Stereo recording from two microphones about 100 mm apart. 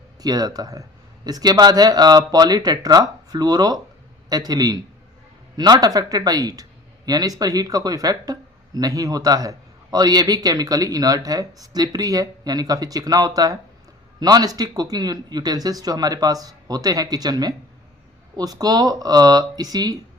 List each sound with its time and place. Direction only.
0.2 s speech: 40° right (ahead or behind)